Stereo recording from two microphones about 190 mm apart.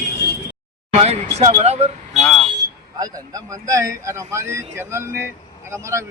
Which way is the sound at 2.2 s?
5° left (ahead or behind).